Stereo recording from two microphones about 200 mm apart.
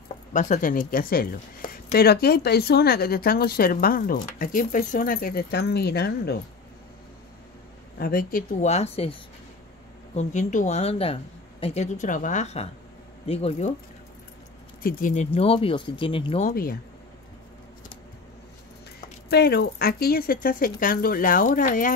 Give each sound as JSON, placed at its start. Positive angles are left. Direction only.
{"t": 0.3, "sound": "a woman's voice", "side_deg": 40}
{"t": 8.0, "sound": "speech", "side_deg": 45}
{"t": 10.1, "sound": "speech", "side_deg": 40}
{"t": 14.8, "sound": "speech", "side_deg": 45}
{"t": 16.4, "sound": "a woman's voice", "side_deg": 45}
{"t": 19.2, "sound": "a woman's voice", "side_deg": 50}